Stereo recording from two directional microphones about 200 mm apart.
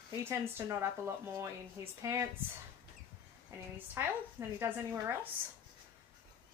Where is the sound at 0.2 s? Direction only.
15° right (ahead or behind).